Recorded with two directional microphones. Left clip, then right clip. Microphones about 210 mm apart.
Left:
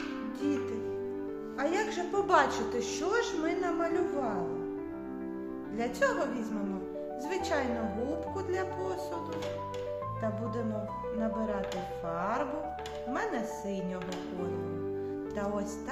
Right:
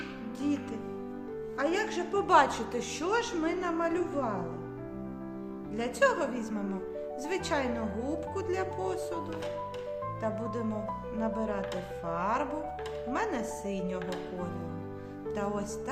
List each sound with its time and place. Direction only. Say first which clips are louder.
1.5 s a woman's voice: right 1 dB; 30° right (ahead or behind)
5.7 s a woman's voice: right 3 dB; 30° right (ahead or behind)
7.3 s a woman's voice: even; 30° right (ahead or behind)
11.2 s a woman's voice: right 1 dB; 30° right (ahead or behind)